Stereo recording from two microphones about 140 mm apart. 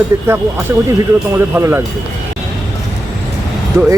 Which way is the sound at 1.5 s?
15° right (ahead or behind).